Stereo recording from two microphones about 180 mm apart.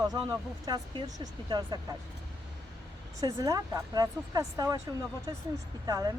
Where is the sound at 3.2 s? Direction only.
20° right (ahead or behind).